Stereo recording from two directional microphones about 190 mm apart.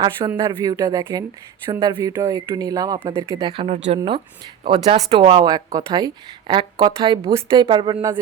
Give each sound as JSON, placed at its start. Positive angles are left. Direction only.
{"t": 0.4, "sound": "speech", "side_deg": -20}
{"t": 3.5, "sound": "speech", "side_deg": -30}